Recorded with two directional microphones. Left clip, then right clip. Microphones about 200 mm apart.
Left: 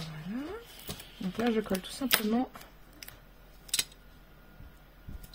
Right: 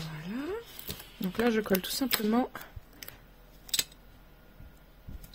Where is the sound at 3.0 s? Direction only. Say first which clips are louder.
Right 1 dB; centre (ahead or behind).